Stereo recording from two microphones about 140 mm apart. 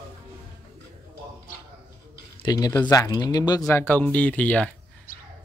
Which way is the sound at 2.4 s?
25° left (ahead or behind).